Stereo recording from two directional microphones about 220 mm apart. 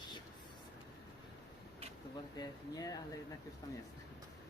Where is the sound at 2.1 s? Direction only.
20° left (ahead or behind).